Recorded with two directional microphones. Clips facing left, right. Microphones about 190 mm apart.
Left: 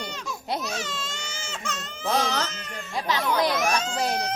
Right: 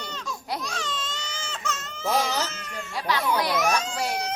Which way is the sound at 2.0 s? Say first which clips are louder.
Even; 10° right (ahead or behind).